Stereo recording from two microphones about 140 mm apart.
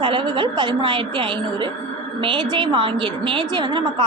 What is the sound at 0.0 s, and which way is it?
A woman's voice, 35° right (ahead or behind).